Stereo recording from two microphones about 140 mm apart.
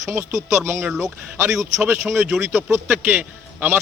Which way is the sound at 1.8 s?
15° right (ahead or behind).